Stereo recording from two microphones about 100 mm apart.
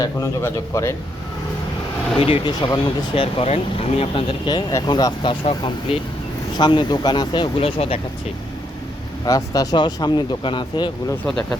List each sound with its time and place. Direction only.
0.4 s speech: 30° left (ahead or behind)
2.1 s speech: 65° left (ahead or behind)
2.4 s speech: 45° left (ahead or behind)
3.2 s speech: 80° left; by 4.6 s 55° left (ahead or behind)
4.9 s speech: 45° left (ahead or behind)
5.3 s speech: 60° left (ahead or behind)
6.6 s speech: 50° left (ahead or behind)
7.6 s speech: 75° left (ahead or behind)
9.2 s speech: 40° left (ahead or behind)